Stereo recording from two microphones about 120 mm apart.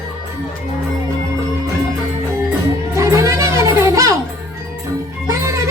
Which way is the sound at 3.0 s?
25° right (ahead or behind).